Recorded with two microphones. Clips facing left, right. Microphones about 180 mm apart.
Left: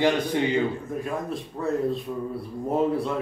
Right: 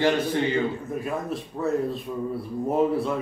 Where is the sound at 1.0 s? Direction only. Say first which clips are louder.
Right 1 dB; centre (ahead or behind).